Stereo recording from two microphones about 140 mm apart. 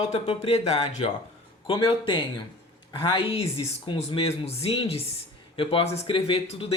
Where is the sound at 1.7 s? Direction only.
35° left (ahead or behind).